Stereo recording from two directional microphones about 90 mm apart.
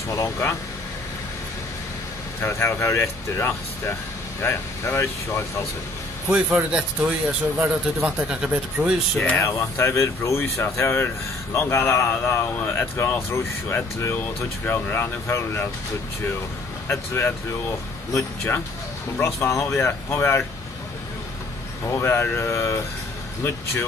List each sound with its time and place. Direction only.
0.1 s speech: 35° left (ahead or behind)
2.4 s speech: 30° left (ahead or behind)
6.2 s speech: 15° right (ahead or behind)
9.4 s speech: 30° left (ahead or behind)
16.8 s speech: 30° left (ahead or behind)
21.8 s speech: 30° left (ahead or behind)